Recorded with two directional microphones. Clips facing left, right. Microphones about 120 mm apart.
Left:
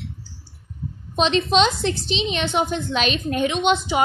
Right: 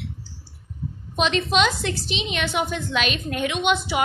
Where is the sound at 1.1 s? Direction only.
30° left (ahead or behind).